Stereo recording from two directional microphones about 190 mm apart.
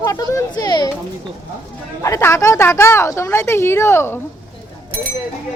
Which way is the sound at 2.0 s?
15° left (ahead or behind).